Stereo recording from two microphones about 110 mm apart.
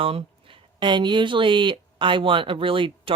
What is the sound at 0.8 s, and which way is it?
Speech, 45° right (ahead or behind).